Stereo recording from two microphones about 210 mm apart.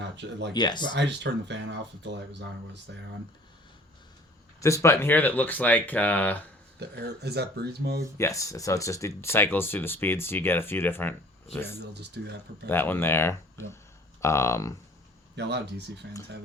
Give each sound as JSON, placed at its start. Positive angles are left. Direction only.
{"t": 0.0, "sound": "speech", "side_deg": -55}
{"t": 0.5, "sound": "speech", "side_deg": 20}
{"t": 0.9, "sound": "speech", "side_deg": -55}
{"t": 4.6, "sound": "speech", "side_deg": 15}
{"t": 6.7, "sound": "speech", "side_deg": -50}
{"t": 8.2, "sound": "speech", "side_deg": 15}
{"t": 11.8, "sound": "speech", "side_deg": -50}
{"t": 12.6, "sound": "speech", "side_deg": 10}
{"t": 15.4, "sound": "speech", "side_deg": -55}